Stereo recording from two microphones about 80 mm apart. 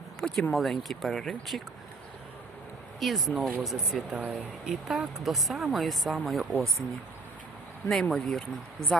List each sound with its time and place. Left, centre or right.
0.2 s speech: centre
3.0 s speech: centre
4.1 s speech: centre
4.6 s speech: centre
8.0 s speech: centre